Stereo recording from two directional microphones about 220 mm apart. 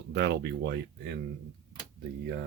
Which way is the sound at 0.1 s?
50° right (ahead or behind).